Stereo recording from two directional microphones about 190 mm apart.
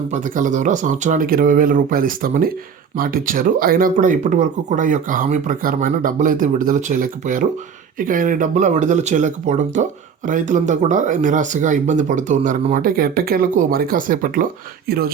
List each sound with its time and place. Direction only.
0.1 s speech: 40° right (ahead or behind)